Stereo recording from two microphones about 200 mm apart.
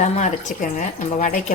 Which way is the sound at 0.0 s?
35° left (ahead or behind).